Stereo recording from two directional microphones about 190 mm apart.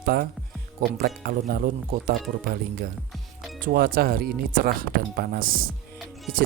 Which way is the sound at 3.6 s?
55° right (ahead or behind).